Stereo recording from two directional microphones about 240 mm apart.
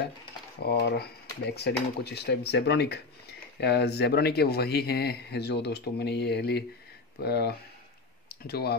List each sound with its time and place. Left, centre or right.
0.6 s speech: left